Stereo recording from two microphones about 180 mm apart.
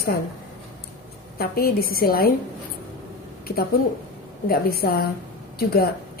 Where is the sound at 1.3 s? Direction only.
55° left (ahead or behind).